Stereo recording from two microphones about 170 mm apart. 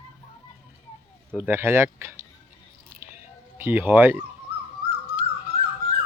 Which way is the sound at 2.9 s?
15° right (ahead or behind).